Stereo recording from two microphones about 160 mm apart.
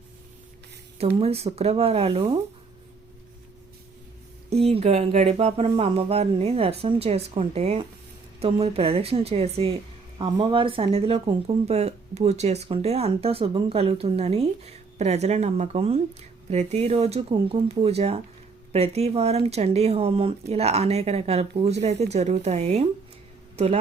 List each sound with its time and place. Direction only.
0.9 s speech: 40° right (ahead or behind)
4.4 s speech: 40° right (ahead or behind)